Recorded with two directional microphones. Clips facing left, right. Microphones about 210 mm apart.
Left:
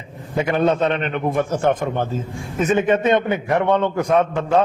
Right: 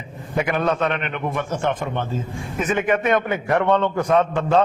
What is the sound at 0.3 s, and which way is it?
A man's voice, 25° left (ahead or behind).